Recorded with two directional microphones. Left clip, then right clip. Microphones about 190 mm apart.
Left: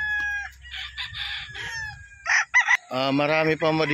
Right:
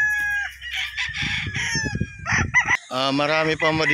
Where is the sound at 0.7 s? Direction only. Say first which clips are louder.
Right 6 dB; 35° left (ahead or behind).